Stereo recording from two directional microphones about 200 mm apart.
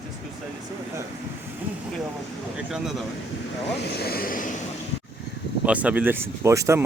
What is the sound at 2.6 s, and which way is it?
Speech, 5° right (ahead or behind).